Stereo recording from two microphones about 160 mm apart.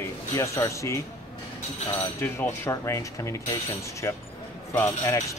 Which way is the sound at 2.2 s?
15° left (ahead or behind).